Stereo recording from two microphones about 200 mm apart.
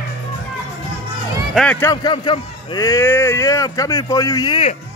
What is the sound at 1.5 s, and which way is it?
Speech, 5° left (ahead or behind).